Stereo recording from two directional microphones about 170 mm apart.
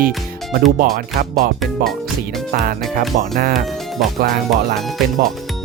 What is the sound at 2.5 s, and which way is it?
Speech, 60° right (ahead or behind).